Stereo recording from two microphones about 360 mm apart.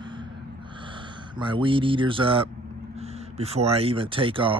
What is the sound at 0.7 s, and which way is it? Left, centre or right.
Speech, centre.